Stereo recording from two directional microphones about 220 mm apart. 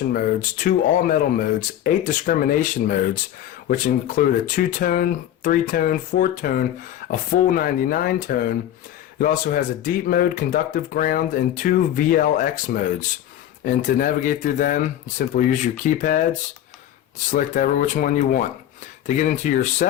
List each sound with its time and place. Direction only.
0.1 s speech: 40° left (ahead or behind)
17.3 s speech: 35° left (ahead or behind)